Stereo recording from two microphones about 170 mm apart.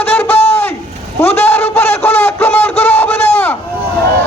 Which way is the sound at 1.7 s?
10° left (ahead or behind).